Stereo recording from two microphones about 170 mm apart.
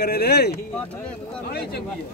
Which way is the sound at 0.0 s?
75° left (ahead or behind).